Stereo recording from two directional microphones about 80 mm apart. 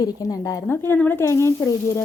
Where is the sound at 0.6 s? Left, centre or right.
Left.